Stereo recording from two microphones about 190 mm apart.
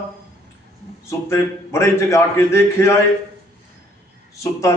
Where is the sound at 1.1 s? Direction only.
15° left (ahead or behind).